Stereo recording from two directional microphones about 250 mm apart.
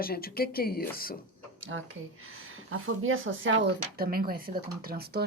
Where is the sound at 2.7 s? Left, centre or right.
Right.